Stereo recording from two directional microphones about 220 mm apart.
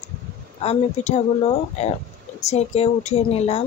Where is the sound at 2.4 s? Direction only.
30° left (ahead or behind).